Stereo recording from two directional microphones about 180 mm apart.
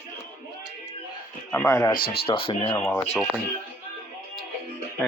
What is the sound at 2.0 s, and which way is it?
Speech, 55° left (ahead or behind).